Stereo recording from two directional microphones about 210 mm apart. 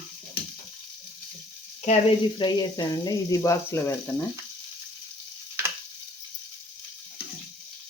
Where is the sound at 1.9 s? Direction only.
25° left (ahead or behind).